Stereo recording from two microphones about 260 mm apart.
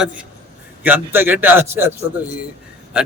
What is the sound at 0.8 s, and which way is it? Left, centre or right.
A man's voice, centre.